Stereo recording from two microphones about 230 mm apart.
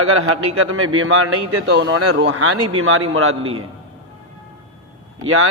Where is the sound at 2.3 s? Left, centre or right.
Right.